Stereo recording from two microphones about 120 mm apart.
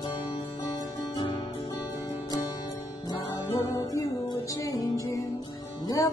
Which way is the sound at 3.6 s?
25° left (ahead or behind).